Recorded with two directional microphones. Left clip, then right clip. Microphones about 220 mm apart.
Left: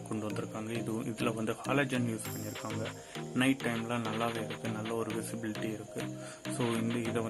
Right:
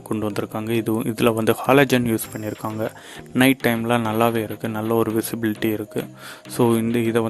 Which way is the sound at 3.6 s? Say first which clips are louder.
Right 14 dB; 45° right (ahead or behind).